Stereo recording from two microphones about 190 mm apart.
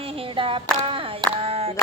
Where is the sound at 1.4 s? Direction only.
30° right (ahead or behind).